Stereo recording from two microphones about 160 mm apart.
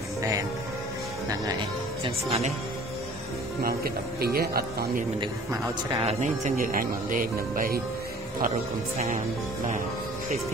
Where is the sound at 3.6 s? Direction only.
70° right (ahead or behind).